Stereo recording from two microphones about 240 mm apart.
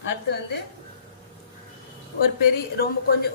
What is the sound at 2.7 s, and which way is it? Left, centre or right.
Speech, left.